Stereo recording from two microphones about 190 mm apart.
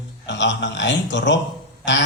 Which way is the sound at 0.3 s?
70° left (ahead or behind).